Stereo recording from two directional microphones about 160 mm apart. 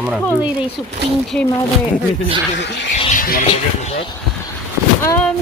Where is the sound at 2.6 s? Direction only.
90° left.